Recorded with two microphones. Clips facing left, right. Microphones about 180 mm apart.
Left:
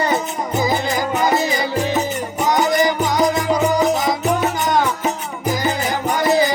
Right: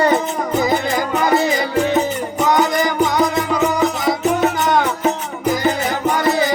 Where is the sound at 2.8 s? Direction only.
55° right (ahead or behind).